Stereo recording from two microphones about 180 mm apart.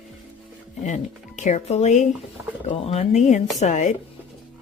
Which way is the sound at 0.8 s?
45° left (ahead or behind).